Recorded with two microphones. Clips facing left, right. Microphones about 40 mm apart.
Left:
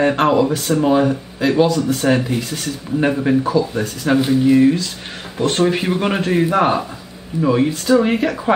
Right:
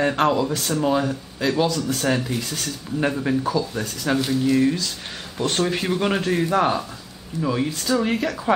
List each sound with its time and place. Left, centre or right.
0.0 s speech: centre